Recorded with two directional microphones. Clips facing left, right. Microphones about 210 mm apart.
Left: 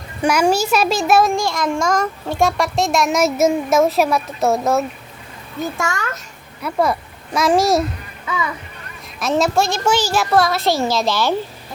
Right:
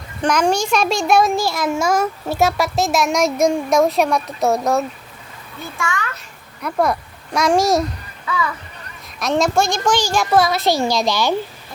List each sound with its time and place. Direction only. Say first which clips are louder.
0.2 s a child's voice: left 1 dB; 10° left (ahead or behind)
5.5 s a child's voice: left 3 dB; 45° left (ahead or behind)
6.6 s a child's voice: even; 5° left (ahead or behind)
8.3 s a child's voice: right 1 dB; 20° left (ahead or behind)
9.1 s a child's voice: even; centre (ahead or behind)